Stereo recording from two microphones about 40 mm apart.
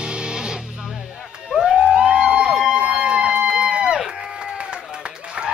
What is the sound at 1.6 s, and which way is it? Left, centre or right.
Police car, right.